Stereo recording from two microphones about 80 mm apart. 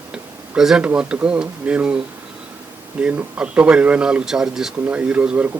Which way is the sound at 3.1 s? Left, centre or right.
Centre.